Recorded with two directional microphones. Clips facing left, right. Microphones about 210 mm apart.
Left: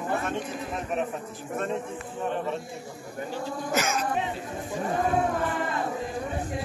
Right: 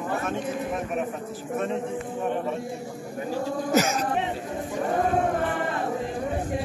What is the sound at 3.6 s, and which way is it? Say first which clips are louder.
Speech: right 5 dB; 40° right (ahead or behind).